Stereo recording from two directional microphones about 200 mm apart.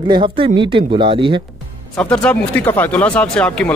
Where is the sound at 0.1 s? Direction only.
25° right (ahead or behind).